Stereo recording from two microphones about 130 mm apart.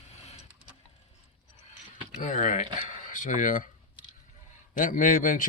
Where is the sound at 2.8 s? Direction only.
75° left (ahead or behind).